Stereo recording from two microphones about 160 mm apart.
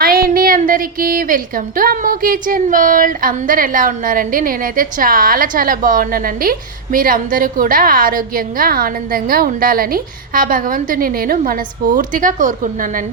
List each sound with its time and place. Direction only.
0.0 s a woman's voice: 65° right (ahead or behind)